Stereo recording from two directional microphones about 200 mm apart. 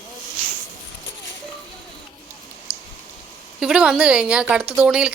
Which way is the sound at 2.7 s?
15° left (ahead or behind).